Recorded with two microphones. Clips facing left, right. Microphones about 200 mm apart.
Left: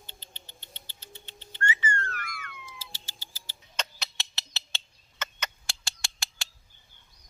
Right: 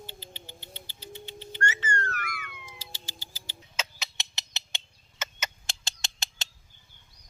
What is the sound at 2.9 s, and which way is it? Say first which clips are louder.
Music: right 4 dB; 15° right (ahead or behind).